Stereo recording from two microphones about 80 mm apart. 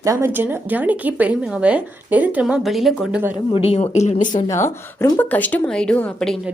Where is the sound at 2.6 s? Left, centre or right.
Centre.